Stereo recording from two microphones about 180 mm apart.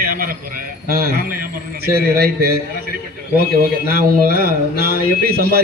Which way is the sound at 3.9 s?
55° right (ahead or behind).